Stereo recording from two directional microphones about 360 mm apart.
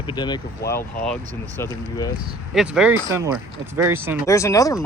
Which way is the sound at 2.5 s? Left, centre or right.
Centre.